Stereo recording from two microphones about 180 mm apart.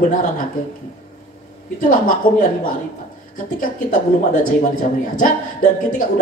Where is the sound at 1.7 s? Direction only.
50° left (ahead or behind).